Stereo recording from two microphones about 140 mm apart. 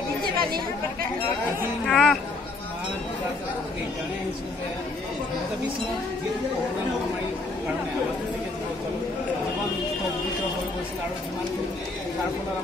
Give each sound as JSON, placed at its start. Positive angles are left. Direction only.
{"t": 0.2, "sound": "chatter", "side_deg": -90}
{"t": 1.9, "sound": "speech", "side_deg": 0}